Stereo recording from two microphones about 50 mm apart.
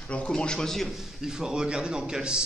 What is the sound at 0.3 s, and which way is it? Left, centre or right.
Speech, centre.